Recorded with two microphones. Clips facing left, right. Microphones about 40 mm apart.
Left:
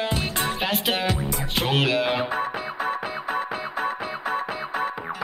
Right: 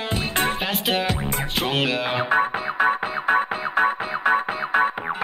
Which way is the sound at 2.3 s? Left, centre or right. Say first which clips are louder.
Right 6 dB; right.